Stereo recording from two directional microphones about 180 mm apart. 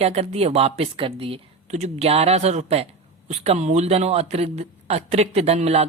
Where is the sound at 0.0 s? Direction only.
35° right (ahead or behind).